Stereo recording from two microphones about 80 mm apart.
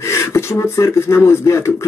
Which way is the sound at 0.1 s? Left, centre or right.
Left.